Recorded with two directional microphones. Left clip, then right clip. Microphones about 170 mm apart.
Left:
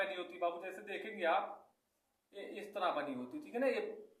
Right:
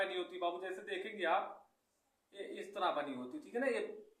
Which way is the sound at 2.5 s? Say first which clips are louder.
Even; 20° left (ahead or behind).